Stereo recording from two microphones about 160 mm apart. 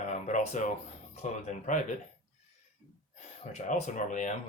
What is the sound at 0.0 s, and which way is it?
Music, 50° left (ahead or behind).